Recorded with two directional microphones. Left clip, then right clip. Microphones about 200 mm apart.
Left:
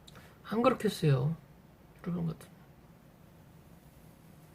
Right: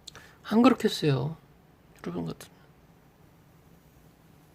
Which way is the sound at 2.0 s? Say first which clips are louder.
Right 5 dB; 50° right (ahead or behind).